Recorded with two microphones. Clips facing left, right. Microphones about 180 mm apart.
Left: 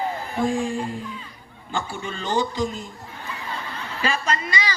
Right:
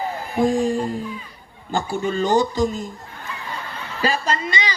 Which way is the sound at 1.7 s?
45° right (ahead or behind).